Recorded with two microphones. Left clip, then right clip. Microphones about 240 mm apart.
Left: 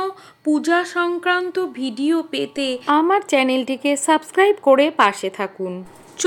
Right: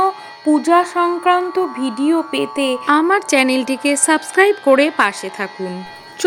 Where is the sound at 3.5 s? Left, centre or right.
Right.